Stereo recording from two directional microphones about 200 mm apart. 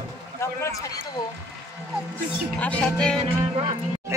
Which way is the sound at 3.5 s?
20° right (ahead or behind).